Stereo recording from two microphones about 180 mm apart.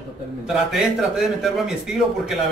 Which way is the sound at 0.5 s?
Centre (ahead or behind).